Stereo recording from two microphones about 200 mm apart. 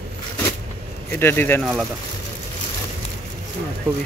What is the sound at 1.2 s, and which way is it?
Speech, 10° left (ahead or behind).